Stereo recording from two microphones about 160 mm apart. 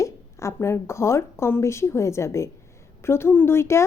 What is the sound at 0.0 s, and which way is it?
A woman's voice, 20° left (ahead or behind).